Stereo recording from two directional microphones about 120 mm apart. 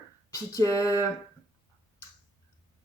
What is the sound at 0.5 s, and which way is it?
Speech, 30° left (ahead or behind).